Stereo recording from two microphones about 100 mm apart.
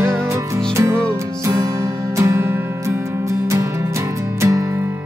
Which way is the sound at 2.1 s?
30° right (ahead or behind).